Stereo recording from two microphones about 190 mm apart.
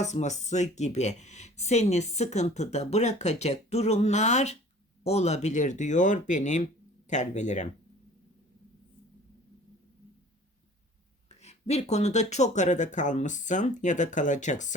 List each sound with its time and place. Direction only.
0.0 s speech: 35° left (ahead or behind)
11.3 s speech: 35° left (ahead or behind)